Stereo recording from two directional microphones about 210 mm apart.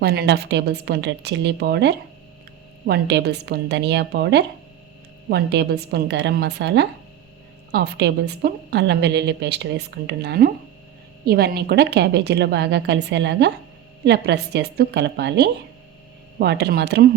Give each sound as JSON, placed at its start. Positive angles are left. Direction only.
{"t": 0.0, "sound": "a woman's voice", "side_deg": -50}